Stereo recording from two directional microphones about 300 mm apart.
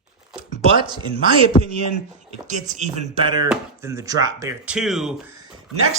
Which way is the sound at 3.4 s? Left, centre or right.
Centre.